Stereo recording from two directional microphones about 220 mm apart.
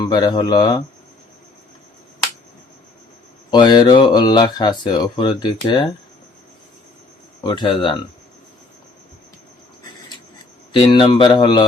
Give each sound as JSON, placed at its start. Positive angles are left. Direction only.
{"t": 0.0, "sound": "speech", "side_deg": 20}
{"t": 3.5, "sound": "speech", "side_deg": 20}
{"t": 7.4, "sound": "speech", "side_deg": 20}
{"t": 10.7, "sound": "speech", "side_deg": 25}